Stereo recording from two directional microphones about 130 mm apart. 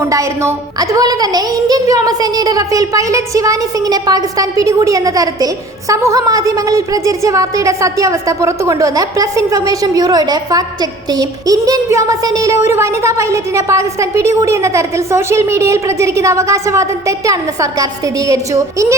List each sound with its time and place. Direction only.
0.0 s a woman's voice: 25° right (ahead or behind)